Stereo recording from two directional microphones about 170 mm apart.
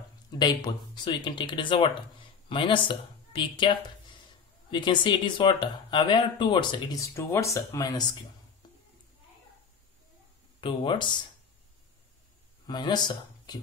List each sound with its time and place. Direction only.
0.3 s speech: 25° left (ahead or behind)
10.6 s speech: 30° left (ahead or behind)
12.6 s speech: 25° left (ahead or behind)